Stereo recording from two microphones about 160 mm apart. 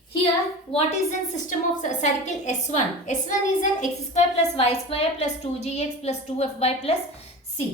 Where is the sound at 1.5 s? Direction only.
50° left (ahead or behind).